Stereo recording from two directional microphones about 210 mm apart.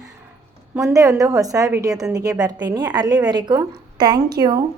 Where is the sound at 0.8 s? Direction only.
15° right (ahead or behind).